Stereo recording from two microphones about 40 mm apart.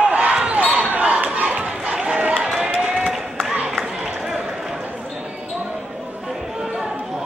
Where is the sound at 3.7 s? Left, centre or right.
Centre.